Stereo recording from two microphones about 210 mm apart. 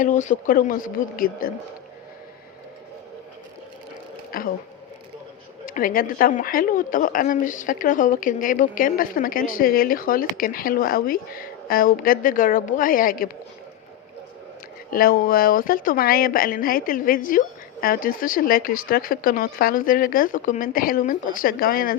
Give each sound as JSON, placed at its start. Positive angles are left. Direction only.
{"t": 0.0, "sound": "a woman's voice", "side_deg": 35}
{"t": 4.3, "sound": "speech", "side_deg": 45}
{"t": 5.6, "sound": "a woman's voice", "side_deg": 40}
{"t": 14.8, "sound": "speech", "side_deg": 45}